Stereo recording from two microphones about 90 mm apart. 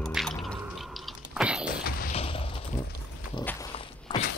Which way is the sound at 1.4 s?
10° right (ahead or behind).